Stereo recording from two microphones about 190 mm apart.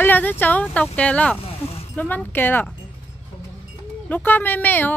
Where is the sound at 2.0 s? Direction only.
10° left (ahead or behind).